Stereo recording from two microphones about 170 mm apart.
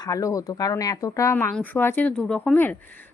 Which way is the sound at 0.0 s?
20° left (ahead or behind).